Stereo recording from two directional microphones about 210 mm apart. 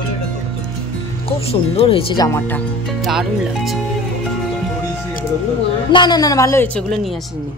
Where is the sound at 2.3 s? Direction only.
10° left (ahead or behind).